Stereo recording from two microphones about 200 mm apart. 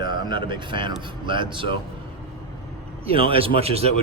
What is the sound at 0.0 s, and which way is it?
A man's voice, 20° right (ahead or behind).